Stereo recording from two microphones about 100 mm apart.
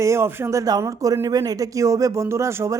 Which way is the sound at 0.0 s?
30° right (ahead or behind).